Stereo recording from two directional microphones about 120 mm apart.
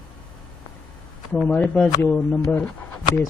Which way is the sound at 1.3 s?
5° left (ahead or behind).